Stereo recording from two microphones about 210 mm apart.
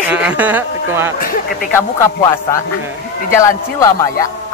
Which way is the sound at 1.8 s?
15° left (ahead or behind).